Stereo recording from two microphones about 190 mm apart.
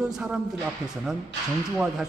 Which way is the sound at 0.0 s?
5° right (ahead or behind).